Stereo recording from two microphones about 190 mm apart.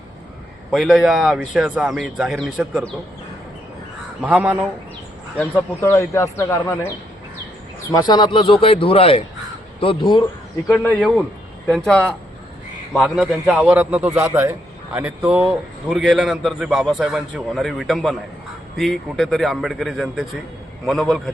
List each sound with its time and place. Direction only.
0.7 s a man's voice: centre (ahead or behind)
4.2 s a man's voice: 5° right (ahead or behind)
5.4 s a man's voice: 10° left (ahead or behind)
10.7 s a man's voice: 5° left (ahead or behind)